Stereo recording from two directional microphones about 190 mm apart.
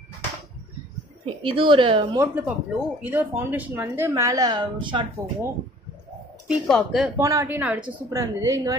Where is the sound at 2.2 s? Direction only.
10° right (ahead or behind).